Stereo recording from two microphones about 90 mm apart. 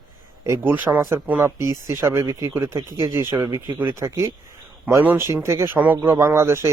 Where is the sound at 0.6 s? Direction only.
20° right (ahead or behind).